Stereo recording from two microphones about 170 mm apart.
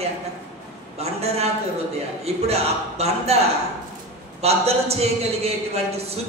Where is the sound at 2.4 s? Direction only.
35° right (ahead or behind).